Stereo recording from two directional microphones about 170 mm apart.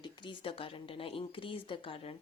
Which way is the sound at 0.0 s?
30° left (ahead or behind).